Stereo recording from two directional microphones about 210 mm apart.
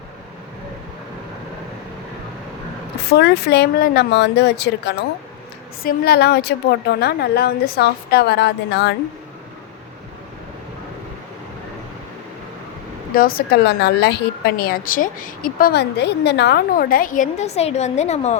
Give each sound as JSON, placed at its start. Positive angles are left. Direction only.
{"t": 3.2, "sound": "a woman's voice", "side_deg": 50}
{"t": 5.8, "sound": "a woman's voice", "side_deg": 45}
{"t": 13.1, "sound": "a woman's voice", "side_deg": 45}